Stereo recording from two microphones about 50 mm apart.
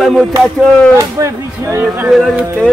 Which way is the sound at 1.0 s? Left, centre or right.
Right.